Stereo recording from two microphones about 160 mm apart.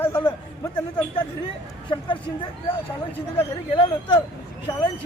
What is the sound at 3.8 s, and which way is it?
Speech, 30° left (ahead or behind).